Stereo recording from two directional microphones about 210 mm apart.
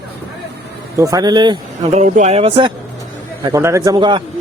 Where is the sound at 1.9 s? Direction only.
35° right (ahead or behind).